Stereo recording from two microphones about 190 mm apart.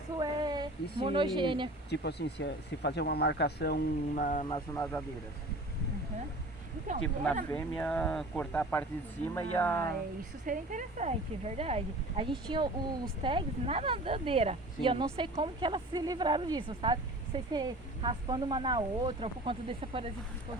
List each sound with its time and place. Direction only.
0.2 s a woman's voice: 20° right (ahead or behind)
1.9 s speech: 60° left (ahead or behind); by 4.4 s 45° left (ahead or behind)
4.7 s speech: 15° left (ahead or behind)
7.5 s speech: 10° left (ahead or behind)
10.4 s speech: 45° right (ahead or behind)